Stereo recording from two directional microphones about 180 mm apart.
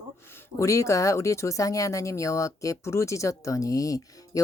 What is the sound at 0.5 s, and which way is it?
Speech, 15° left (ahead or behind).